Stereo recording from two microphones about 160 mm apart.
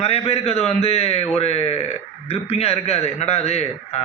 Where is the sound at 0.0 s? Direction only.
40° left (ahead or behind).